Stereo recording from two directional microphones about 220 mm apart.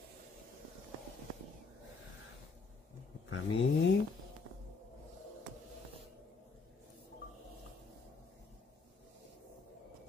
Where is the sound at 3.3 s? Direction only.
60° left (ahead or behind).